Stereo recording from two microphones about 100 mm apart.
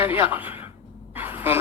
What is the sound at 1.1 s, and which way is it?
Gasp, 20° right (ahead or behind).